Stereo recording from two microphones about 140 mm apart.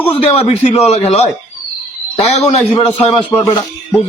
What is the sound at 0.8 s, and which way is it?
A man's voice, 50° left (ahead or behind).